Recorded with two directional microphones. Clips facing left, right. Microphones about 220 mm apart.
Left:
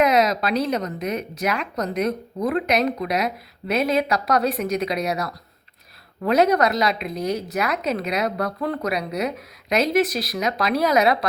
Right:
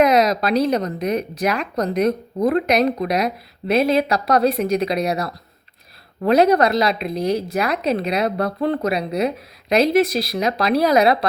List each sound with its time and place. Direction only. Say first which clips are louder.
0.0 s speech: right 3 dB; 40° right (ahead or behind)